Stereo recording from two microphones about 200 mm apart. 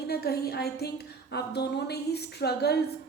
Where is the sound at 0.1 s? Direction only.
50° left (ahead or behind).